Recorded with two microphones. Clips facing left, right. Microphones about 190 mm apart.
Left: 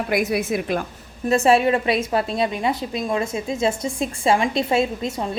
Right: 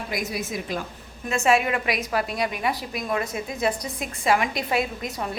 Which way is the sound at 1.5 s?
30° left (ahead or behind).